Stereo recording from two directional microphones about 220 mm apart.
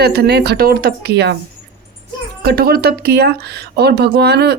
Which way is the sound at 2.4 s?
45° right (ahead or behind).